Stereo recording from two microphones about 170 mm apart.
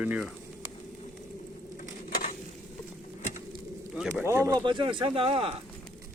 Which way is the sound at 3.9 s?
5° right (ahead or behind).